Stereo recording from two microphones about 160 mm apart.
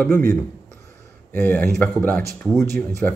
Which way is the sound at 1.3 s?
10° left (ahead or behind).